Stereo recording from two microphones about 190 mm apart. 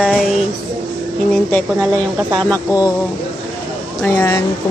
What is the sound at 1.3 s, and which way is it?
A woman's voice, 5° left (ahead or behind).